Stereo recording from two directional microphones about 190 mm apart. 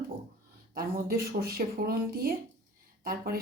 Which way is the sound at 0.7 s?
50° right (ahead or behind).